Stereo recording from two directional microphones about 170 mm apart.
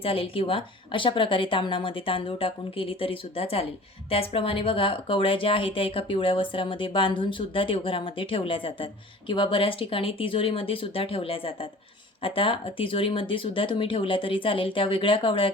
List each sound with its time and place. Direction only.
0.0 s speech: 35° left (ahead or behind)